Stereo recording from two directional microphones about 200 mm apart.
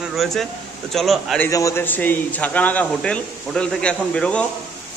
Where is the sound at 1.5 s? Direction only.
15° left (ahead or behind).